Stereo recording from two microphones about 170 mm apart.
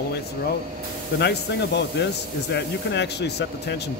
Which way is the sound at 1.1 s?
90° left.